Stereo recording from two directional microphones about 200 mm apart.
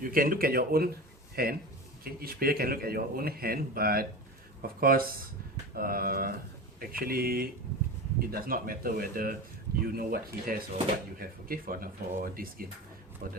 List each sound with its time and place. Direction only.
0.0 s a man's voice: 45° right (ahead or behind)